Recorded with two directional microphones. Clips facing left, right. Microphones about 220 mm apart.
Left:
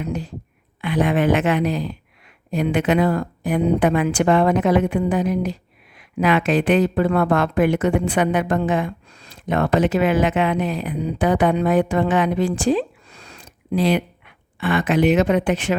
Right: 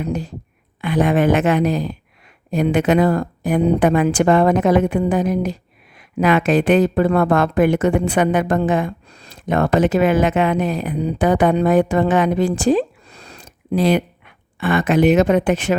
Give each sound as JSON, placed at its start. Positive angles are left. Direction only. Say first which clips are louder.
{"t": 0.0, "sound": "a woman's voice", "louder": "right 3 dB", "side_deg": -40}